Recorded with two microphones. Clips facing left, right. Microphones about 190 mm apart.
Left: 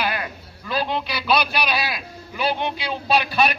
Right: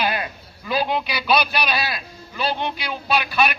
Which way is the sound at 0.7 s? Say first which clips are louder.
Right 2 dB; 5° right (ahead or behind).